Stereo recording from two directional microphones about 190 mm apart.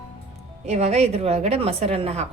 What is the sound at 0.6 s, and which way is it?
A woman's voice, 35° right (ahead or behind).